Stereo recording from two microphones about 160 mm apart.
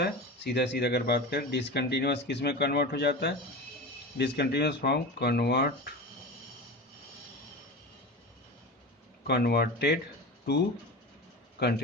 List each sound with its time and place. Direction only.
0.0 s speech: 90° left
9.2 s speech: 85° left